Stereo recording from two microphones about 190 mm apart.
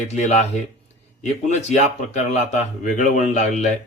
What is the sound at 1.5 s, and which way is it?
Speech, 35° left (ahead or behind).